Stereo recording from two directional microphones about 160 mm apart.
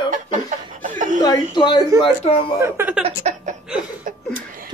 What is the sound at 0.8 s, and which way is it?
Chuckle, 55° right (ahead or behind).